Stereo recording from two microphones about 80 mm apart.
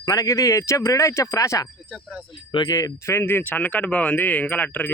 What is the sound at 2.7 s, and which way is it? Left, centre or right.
Speech, left.